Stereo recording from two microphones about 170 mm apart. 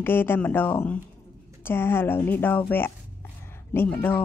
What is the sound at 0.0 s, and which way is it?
A child's voice, 10° left (ahead or behind).